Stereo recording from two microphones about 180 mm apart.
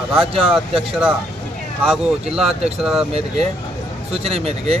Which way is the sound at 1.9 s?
5° right (ahead or behind).